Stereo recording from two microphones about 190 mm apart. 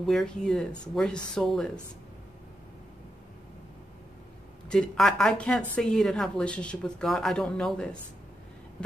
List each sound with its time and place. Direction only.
0.0 s speech: centre (ahead or behind)
4.6 s speech: 5° left (ahead or behind)